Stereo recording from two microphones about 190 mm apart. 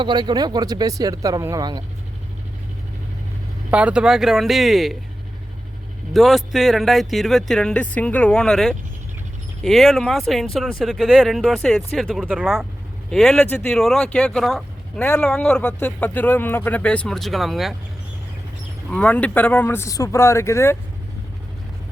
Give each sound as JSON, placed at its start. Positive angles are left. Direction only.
{"t": 0.0, "sound": "speech", "side_deg": -25}
{"t": 3.7, "sound": "speech", "side_deg": -5}
{"t": 6.1, "sound": "speech", "side_deg": 0}
{"t": 18.9, "sound": "speech", "side_deg": 5}